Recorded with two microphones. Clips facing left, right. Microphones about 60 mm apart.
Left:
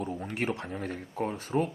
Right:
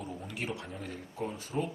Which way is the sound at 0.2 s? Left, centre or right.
Left.